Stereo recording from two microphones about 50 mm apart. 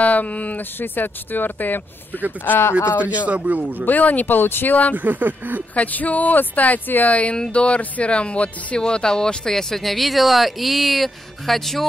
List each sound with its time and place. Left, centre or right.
0.0 s speech: left
0.7 s speech: left
3.0 s speech: right
3.8 s speech: left
4.9 s speech: right
5.8 s speech: left; by 11.8 s centre